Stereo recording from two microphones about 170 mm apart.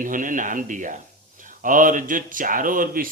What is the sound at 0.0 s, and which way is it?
Speech, 50° right (ahead or behind).